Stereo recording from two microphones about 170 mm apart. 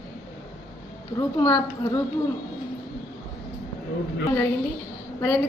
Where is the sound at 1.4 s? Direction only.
20° left (ahead or behind).